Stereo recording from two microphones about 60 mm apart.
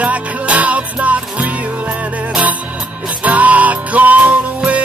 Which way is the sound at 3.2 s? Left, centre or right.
Right.